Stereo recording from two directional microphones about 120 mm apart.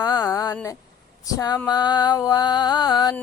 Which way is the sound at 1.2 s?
30° left (ahead or behind).